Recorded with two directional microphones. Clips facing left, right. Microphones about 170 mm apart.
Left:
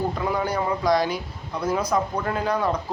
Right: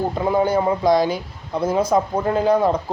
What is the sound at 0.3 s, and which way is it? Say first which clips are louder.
Speech: right 9 dB; 25° right (ahead or behind).